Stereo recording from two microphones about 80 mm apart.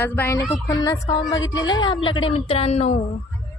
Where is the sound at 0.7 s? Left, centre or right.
Left.